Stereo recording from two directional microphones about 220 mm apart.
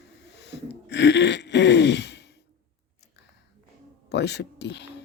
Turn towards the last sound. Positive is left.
turn(degrees=50)  # may be behind; listen again after turning